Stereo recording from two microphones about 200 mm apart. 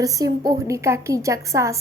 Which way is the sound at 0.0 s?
15° right (ahead or behind).